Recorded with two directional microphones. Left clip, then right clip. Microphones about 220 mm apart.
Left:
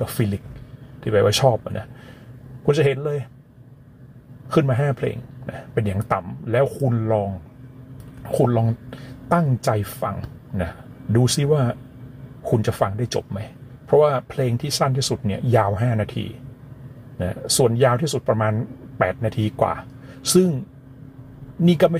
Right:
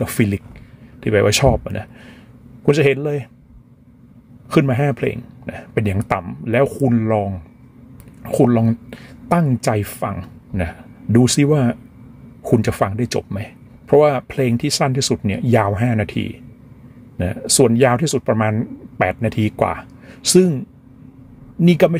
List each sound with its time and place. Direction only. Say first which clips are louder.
0.0 s speech: right 5 dB; 45° right (ahead or behind)
4.5 s speech: right 3 dB; 45° right (ahead or behind)
21.6 s speech: right 3 dB; 45° right (ahead or behind)